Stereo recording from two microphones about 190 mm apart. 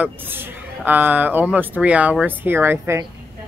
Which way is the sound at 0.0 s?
10° right (ahead or behind).